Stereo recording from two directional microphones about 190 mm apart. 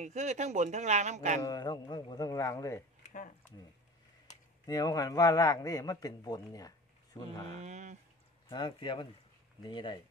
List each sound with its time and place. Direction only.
0.0 s speech: 40° right (ahead or behind)
1.4 s a man's voice: 20° left (ahead or behind)
4.6 s a man's voice: 20° left (ahead or behind)
7.5 s speech: 35° right (ahead or behind)
8.5 s a man's voice: 25° left (ahead or behind)